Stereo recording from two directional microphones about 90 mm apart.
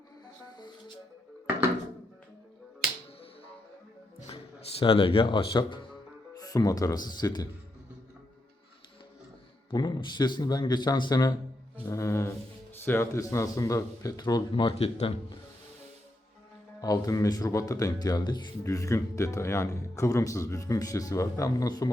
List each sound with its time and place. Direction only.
4.8 s speech: 90° left; by 5.8 s 60° left (ahead or behind)
6.4 s speech: 40° left (ahead or behind)
9.6 s speech: 50° left (ahead or behind)
11.9 s speech: 35° left (ahead or behind)
13.1 s speech: 35° left (ahead or behind)
14.5 s speech: 90° left
16.8 s speech: 45° left (ahead or behind)
18.6 s speech: 35° left (ahead or behind)